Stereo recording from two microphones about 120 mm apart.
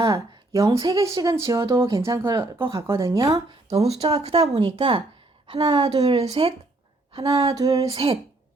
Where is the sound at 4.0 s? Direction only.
35° right (ahead or behind).